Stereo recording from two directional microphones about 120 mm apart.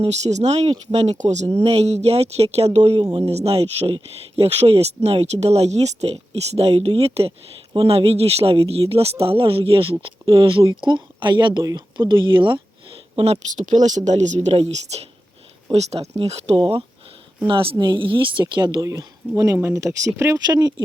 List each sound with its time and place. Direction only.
0.0 s speech: 70° right (ahead or behind)
1.2 s speech: 75° right (ahead or behind)
1.5 s speech: 60° right (ahead or behind)
3.0 s speech: 35° right (ahead or behind)
3.3 s speech: 60° right (ahead or behind)
13.6 s speech: 90° right; by 16.6 s 60° right (ahead or behind)
17.4 s speech: 45° right (ahead or behind)
18.8 s speech: 25° right (ahead or behind)